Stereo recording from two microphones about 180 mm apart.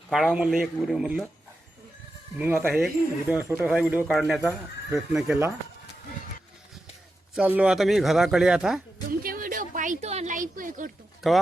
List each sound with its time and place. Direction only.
0.1 s speech: centre (ahead or behind)
2.4 s speech: 10° right (ahead or behind)
7.3 s speech: 5° right (ahead or behind)
9.2 s a sound: 50° right (ahead or behind)
11.2 s speech: centre (ahead or behind)